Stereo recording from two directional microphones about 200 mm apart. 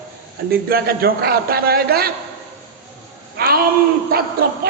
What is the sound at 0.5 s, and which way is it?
A man's voice, 50° right (ahead or behind).